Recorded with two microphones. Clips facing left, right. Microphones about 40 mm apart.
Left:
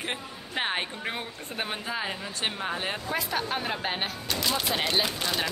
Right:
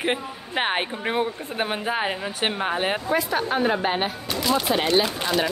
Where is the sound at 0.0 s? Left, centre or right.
Right.